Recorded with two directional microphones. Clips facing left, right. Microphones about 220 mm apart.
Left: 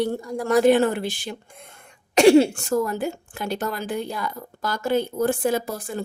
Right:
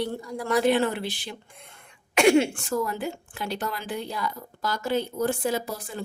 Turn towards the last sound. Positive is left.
turn(degrees=50)  # may be behind; listen again after turning